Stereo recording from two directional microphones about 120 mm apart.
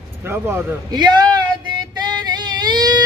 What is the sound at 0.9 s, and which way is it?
Speech, 35° right (ahead or behind).